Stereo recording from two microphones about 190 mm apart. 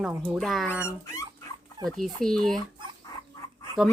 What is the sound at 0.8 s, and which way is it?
Speech, 15° left (ahead or behind).